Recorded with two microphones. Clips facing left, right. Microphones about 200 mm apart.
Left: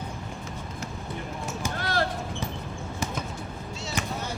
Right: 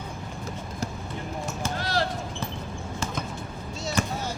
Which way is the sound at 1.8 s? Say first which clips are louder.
Even; 50° left (ahead or behind).